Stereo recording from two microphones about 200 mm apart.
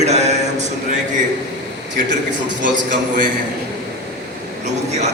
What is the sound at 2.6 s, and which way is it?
Speech, 40° right (ahead or behind).